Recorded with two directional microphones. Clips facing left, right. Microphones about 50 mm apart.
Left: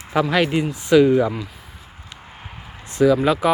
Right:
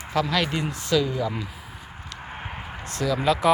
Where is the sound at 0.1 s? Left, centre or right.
Left.